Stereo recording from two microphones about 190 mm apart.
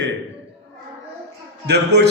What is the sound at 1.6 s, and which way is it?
Speech, 60° right (ahead or behind).